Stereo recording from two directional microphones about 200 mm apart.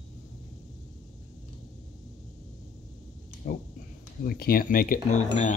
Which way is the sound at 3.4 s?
45° left (ahead or behind).